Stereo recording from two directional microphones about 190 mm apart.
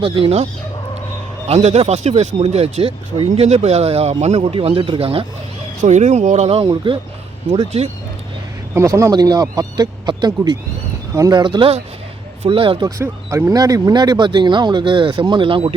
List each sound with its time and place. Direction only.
0.0 s speech: 30° right (ahead or behind)
1.5 s speech: 35° right (ahead or behind)
8.7 s speech: 15° right (ahead or behind)
13.0 s speech: 15° right (ahead or behind)